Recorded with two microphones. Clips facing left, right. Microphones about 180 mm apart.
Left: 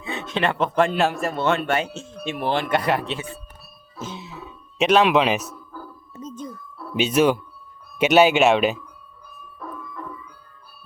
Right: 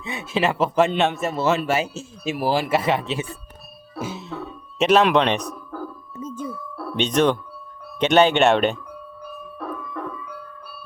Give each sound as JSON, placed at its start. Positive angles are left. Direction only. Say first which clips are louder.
{"t": 0.0, "sound": "a man's voice", "louder": "right 1 dB", "side_deg": -10}
{"t": 4.0, "sound": "music", "louder": "right 4 dB", "side_deg": 0}
{"t": 6.2, "sound": "ice cream truck", "louder": "right 3 dB", "side_deg": -10}
{"t": 6.5, "sound": "a sound", "louder": "right 6 dB", "side_deg": -75}
{"t": 6.9, "sound": "speech", "louder": "left 1 dB", "side_deg": 5}
{"t": 9.2, "sound": "ice cream truck", "louder": "right 5 dB", "side_deg": -75}